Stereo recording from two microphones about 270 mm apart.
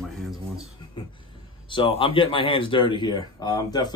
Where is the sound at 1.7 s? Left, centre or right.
Centre.